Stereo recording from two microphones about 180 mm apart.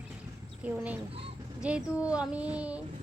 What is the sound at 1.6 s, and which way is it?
Speech, 5° right (ahead or behind).